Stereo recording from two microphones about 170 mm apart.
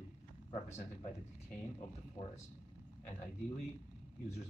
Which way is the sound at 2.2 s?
25° left (ahead or behind).